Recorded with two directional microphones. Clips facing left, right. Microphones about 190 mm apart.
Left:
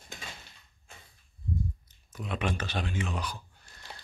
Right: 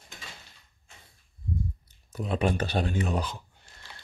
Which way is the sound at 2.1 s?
35° right (ahead or behind).